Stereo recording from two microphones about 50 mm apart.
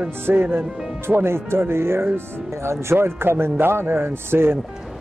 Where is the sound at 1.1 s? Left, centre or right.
Right.